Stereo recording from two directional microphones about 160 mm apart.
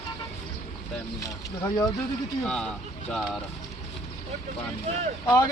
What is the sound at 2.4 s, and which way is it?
Speech, 5° left (ahead or behind).